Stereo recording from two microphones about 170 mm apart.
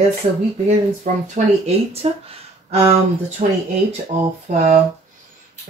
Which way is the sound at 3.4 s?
45° right (ahead or behind).